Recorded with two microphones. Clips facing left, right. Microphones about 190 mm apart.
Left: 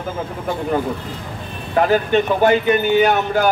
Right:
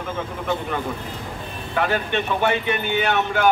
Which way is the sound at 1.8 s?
35° left (ahead or behind).